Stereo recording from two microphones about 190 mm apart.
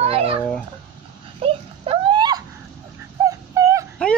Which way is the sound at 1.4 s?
30° right (ahead or behind).